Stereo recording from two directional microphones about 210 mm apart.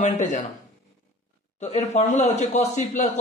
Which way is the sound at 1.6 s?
30° left (ahead or behind).